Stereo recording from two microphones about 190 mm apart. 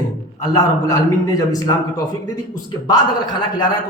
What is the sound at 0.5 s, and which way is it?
A man's voice, 20° left (ahead or behind).